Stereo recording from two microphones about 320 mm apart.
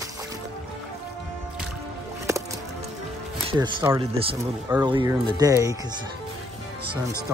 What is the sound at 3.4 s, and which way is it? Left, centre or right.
Speech, centre.